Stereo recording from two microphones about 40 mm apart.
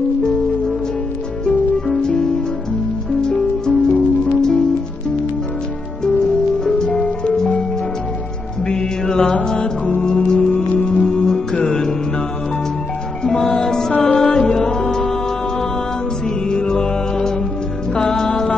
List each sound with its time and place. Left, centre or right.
3.2 s music: centre
6.6 s music: centre
8.6 s music: centre
13.2 s music: centre
16.4 s music: left